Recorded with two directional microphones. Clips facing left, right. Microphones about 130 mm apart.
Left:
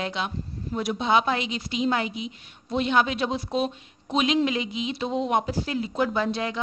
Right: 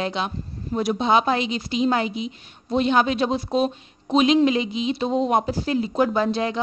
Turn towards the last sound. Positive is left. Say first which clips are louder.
# right 4 dB
turn(degrees=-35)  # may be behind; listen again after turning